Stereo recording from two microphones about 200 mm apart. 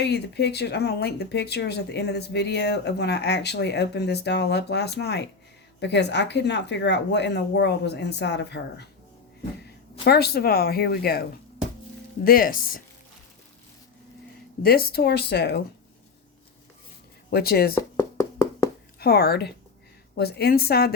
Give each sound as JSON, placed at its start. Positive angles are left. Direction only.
{"t": 0.0, "sound": "speech", "side_deg": 55}
{"t": 10.0, "sound": "speech", "side_deg": 55}
{"t": 12.2, "sound": "speech", "side_deg": 45}
{"t": 14.6, "sound": "speech", "side_deg": 50}
{"t": 17.3, "sound": "speech", "side_deg": 50}
{"t": 17.7, "sound": "a sound", "side_deg": 15}
{"t": 18.9, "sound": "speech", "side_deg": 50}